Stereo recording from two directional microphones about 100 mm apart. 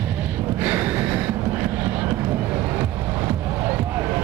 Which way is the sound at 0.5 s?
20° right (ahead or behind).